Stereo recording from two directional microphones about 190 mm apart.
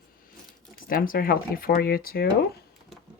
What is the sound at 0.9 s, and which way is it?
Speech, 50° left (ahead or behind).